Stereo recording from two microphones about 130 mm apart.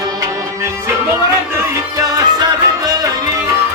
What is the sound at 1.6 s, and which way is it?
Music, 30° right (ahead or behind).